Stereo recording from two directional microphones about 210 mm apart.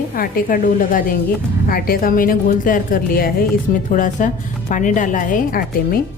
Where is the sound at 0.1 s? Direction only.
40° left (ahead or behind).